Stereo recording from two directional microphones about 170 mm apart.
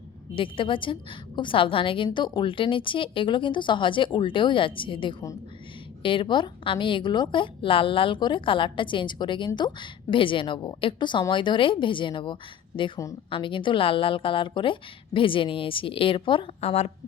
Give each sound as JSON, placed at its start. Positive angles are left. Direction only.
{"t": 0.3, "sound": "a woman's voice", "side_deg": 30}